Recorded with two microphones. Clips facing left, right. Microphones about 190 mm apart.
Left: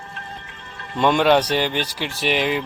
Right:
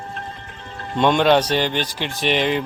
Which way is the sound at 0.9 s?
5° left (ahead or behind).